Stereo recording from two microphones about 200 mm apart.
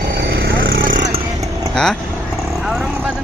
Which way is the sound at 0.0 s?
50° right (ahead or behind).